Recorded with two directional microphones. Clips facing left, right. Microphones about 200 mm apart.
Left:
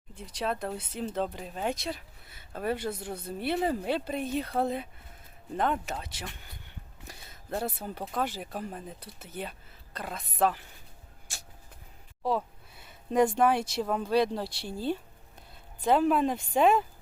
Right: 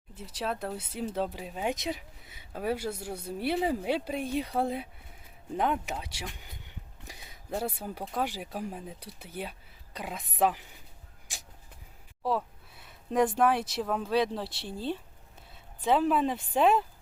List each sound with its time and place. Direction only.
0.2 s speech: 5° right (ahead or behind)
1.7 s speech: 15° right (ahead or behind)
11.3 s a sound: 15° right (ahead or behind)
12.2 s speech: centre (ahead or behind)